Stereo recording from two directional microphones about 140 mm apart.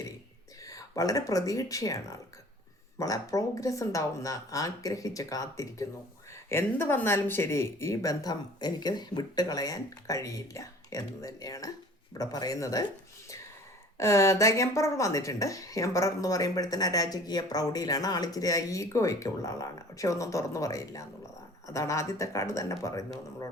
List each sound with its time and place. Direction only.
0.6 s a woman's voice: 25° left (ahead or behind)
14.0 s a woman's voice: 20° left (ahead or behind)